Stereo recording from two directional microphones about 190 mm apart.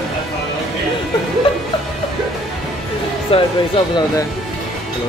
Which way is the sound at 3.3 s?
30° left (ahead or behind).